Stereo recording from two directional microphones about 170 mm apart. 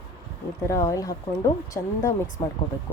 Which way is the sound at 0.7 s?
20° left (ahead or behind).